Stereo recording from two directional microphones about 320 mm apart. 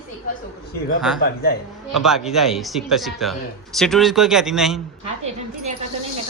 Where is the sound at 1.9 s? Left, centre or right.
Centre.